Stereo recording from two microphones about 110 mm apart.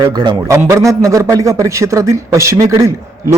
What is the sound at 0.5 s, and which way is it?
A man's voice, 30° right (ahead or behind).